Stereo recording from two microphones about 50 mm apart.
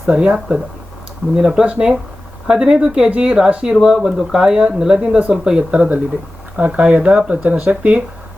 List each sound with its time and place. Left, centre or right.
0.1 s speech: right